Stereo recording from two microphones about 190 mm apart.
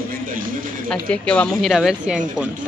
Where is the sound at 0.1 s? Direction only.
45° right (ahead or behind).